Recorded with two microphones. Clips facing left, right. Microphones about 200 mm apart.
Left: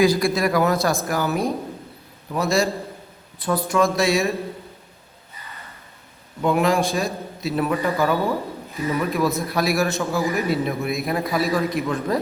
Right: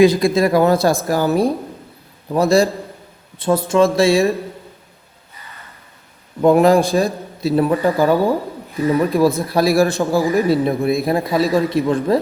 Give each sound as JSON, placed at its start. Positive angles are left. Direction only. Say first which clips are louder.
{"t": 0.0, "sound": "a man's voice", "louder": "right 6 dB", "side_deg": -20}
{"t": 6.4, "sound": "a man's voice", "louder": "right 8 dB", "side_deg": -35}